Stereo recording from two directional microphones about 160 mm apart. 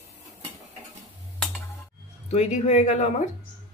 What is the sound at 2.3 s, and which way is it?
Speech, 45° left (ahead or behind).